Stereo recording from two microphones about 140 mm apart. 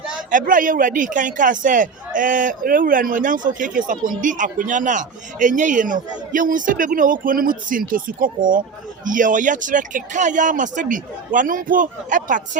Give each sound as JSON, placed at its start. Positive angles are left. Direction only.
{"t": 0.3, "sound": "a man's voice", "side_deg": -70}